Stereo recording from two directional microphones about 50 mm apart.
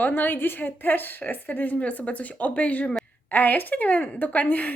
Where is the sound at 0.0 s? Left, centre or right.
Left.